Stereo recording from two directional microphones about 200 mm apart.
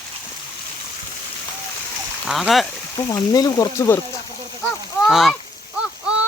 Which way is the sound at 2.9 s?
20° left (ahead or behind).